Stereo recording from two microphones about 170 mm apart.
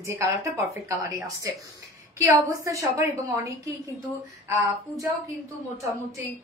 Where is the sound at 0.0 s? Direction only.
15° right (ahead or behind).